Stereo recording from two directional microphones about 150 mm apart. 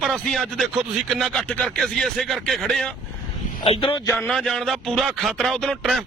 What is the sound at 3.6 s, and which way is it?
Speech, 40° left (ahead or behind).